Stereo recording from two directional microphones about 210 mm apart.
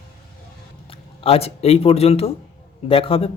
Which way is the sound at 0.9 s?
25° left (ahead or behind).